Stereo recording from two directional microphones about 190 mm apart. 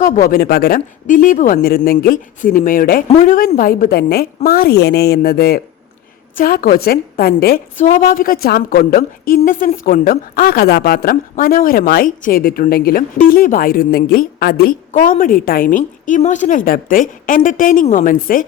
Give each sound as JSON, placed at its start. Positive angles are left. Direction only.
{"t": 0.0, "sound": "a woman's voice", "side_deg": 50}